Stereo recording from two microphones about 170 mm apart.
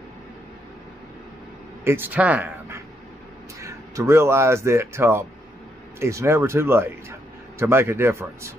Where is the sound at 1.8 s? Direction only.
10° right (ahead or behind).